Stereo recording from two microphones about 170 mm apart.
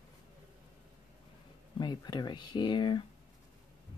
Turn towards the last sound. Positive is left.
turn(degrees=25)  # may be behind; listen again after turning